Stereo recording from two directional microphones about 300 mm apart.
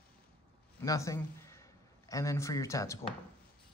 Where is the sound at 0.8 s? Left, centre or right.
Centre.